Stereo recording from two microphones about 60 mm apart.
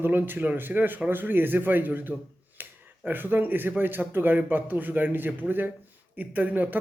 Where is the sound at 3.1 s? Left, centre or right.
Right.